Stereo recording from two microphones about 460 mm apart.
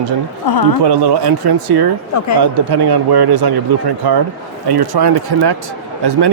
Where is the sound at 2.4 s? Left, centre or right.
Right.